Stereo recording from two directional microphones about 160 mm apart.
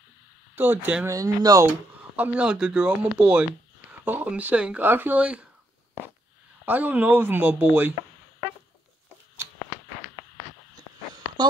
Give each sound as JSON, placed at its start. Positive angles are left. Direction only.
{"t": 0.6, "sound": "speech", "side_deg": -10}
{"t": 1.7, "sound": "speech", "side_deg": -10}
{"t": 6.6, "sound": "speech", "side_deg": -10}